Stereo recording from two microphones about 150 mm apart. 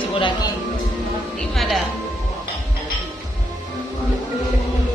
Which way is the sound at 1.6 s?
Centre (ahead or behind).